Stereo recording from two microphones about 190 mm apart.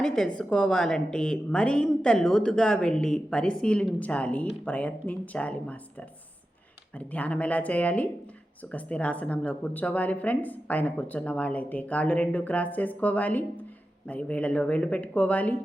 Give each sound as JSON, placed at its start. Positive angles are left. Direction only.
{"t": 0.0, "sound": "a woman's voice", "side_deg": 5}